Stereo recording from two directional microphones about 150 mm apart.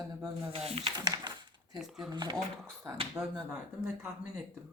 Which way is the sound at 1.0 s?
25° right (ahead or behind).